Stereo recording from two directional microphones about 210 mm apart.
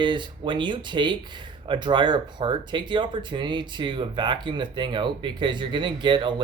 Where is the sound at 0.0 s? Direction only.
20° right (ahead or behind).